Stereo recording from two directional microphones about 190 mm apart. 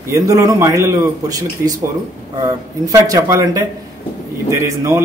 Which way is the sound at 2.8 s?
20° right (ahead or behind).